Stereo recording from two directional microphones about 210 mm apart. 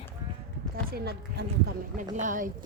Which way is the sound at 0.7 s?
45° right (ahead or behind).